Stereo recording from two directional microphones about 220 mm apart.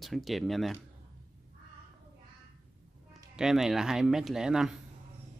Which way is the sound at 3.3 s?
Centre (ahead or behind).